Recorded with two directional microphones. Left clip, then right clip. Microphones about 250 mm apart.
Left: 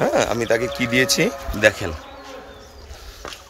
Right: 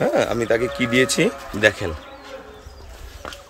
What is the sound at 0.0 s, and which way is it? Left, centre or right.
A man's voice, centre.